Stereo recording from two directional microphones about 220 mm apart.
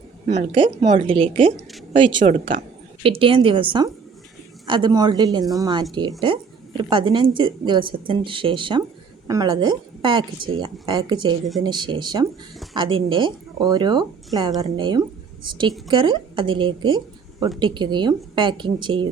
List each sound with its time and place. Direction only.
0.3 s a woman's voice: 25° right (ahead or behind)